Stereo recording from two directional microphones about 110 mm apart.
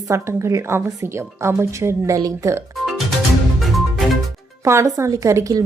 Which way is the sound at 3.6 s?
Centre (ahead or behind).